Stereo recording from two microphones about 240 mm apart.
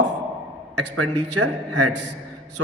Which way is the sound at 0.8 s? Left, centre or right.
Right.